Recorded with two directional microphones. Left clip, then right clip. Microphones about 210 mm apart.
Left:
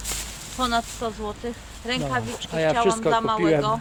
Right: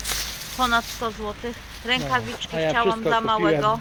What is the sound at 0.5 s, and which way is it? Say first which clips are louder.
Speech: right 2 dB; 10° left (ahead or behind).